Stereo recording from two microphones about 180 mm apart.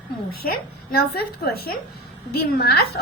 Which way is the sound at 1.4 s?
60° left (ahead or behind).